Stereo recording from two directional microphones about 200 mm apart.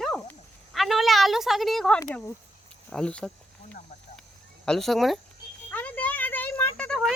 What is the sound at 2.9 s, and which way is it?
Cricket, 5° left (ahead or behind).